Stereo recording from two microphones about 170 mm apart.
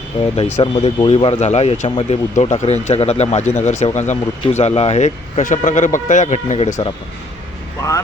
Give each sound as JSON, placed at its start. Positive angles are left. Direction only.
{"t": 0.3, "sound": "speech", "side_deg": 35}